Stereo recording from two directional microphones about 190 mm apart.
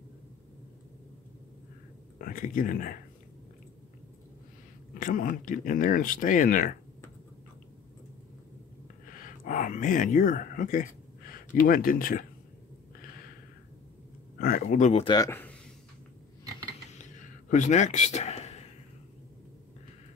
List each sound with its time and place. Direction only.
2.1 s speech: 45° left (ahead or behind)
4.9 s speech: 45° left (ahead or behind)
9.2 s speech: 45° left (ahead or behind)
14.4 s speech: 45° left (ahead or behind)
15.1 s speech: 15° left (ahead or behind)
16.9 s a sound: 40° left (ahead or behind)